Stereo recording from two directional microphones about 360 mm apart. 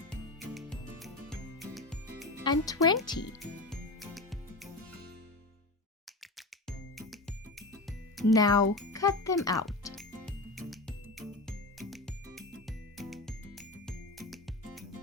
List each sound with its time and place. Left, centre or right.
0.3 s music: centre
2.4 s speech: centre
3.4 s music: centre
6.3 s music: centre
8.4 s speech: centre
8.7 s music: centre